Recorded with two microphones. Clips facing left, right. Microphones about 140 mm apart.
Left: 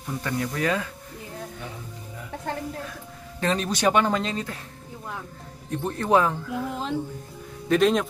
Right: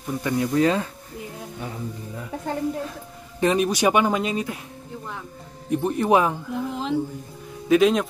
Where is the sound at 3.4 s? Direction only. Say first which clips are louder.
Right 4 dB; 15° right (ahead or behind).